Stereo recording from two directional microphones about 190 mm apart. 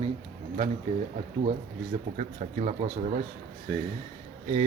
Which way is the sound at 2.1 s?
40° right (ahead or behind).